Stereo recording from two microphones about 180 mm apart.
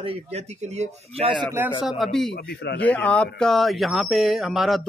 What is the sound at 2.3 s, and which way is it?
Speech, 65° left (ahead or behind).